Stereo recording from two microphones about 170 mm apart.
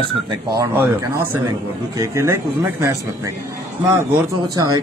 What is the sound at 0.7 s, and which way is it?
A man's voice, 10° right (ahead or behind).